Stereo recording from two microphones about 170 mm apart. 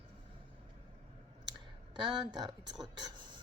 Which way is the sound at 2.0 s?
25° right (ahead or behind).